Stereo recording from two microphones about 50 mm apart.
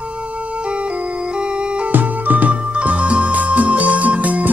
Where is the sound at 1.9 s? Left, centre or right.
Right.